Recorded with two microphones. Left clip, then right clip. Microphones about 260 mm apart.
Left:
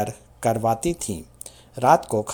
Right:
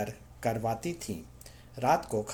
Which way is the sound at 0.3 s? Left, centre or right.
Left.